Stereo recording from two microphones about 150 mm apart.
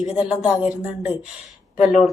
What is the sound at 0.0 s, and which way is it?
Speech, 5° right (ahead or behind).